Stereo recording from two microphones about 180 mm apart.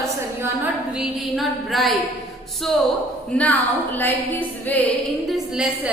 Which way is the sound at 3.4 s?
10° left (ahead or behind).